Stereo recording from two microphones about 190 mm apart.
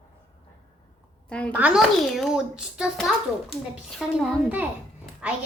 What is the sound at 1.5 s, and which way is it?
A child's voice, 5° right (ahead or behind).